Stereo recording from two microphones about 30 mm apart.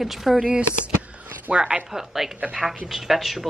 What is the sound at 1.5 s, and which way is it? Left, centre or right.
Speech, right.